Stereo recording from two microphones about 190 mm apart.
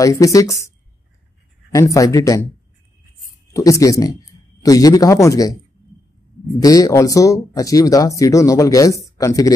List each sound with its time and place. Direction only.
0.0 s speech: 15° left (ahead or behind)
3.5 s speech: 15° left (ahead or behind)
6.6 s speech: 20° left (ahead or behind)